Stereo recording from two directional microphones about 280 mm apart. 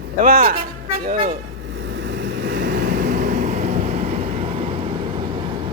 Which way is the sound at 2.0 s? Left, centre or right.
Right.